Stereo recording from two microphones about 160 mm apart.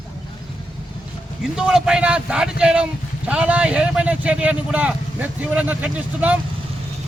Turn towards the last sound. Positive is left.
turn(degrees=-10)  # may be behind; listen again after turning